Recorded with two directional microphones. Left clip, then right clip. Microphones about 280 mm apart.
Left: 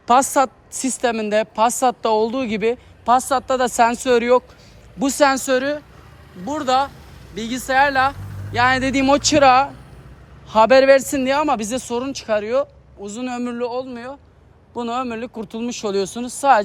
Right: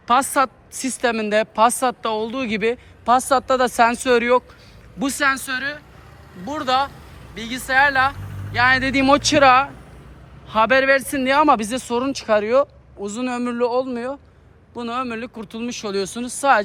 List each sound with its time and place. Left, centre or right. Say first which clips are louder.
0.1 s a woman's voice: left 2 dB; centre
14.7 s a woman's voice: left 2 dB; centre